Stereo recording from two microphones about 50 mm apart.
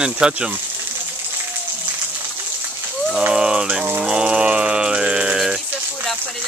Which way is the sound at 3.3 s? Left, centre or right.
Centre.